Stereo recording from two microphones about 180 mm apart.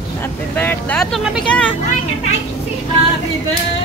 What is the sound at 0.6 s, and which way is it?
Music, 10° left (ahead or behind).